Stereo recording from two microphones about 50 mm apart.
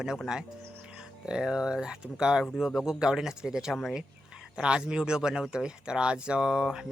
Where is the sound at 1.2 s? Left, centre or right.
Centre.